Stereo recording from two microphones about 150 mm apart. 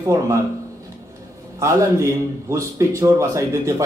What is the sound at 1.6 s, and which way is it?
A man's voice, 20° right (ahead or behind).